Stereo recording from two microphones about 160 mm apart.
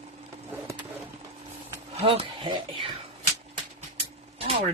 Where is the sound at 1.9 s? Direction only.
35° right (ahead or behind).